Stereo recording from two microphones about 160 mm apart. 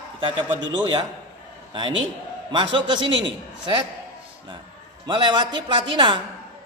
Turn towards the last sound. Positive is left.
turn(degrees=-30)  # may be behind; listen again after turning